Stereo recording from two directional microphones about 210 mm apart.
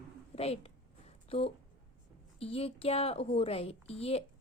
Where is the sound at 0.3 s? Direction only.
30° left (ahead or behind).